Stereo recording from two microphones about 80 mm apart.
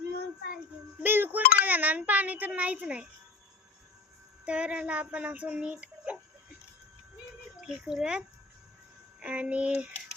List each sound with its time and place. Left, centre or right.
1.0 s a sound: right
4.4 s speech: centre
7.6 s speech: centre
9.2 s speech: centre